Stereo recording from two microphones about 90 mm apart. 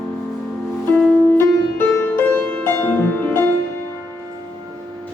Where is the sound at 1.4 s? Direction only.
25° left (ahead or behind).